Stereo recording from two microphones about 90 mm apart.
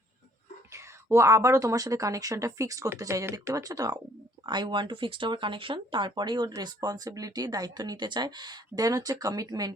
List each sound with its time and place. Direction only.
0.7 s speech: 35° right (ahead or behind)
4.4 s speech: 60° right (ahead or behind)